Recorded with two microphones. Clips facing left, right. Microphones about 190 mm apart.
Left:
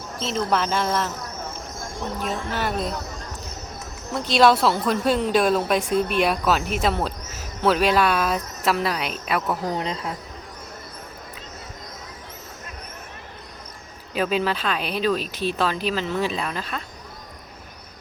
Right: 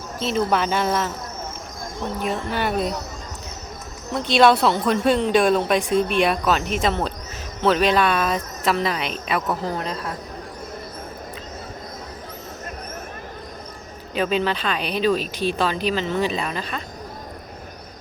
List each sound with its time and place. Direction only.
0.3 s speech: centre (ahead or behind)
2.2 s speech: centre (ahead or behind)
4.1 s speech: centre (ahead or behind)
9.6 s speech: 20° left (ahead or behind)
14.2 s speech: 5° left (ahead or behind)